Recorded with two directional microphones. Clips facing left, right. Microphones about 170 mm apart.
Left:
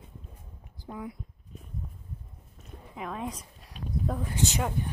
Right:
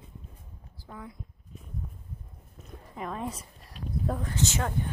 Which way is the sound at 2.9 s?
Centre (ahead or behind).